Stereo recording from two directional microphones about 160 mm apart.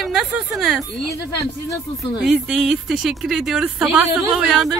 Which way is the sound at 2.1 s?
5° right (ahead or behind).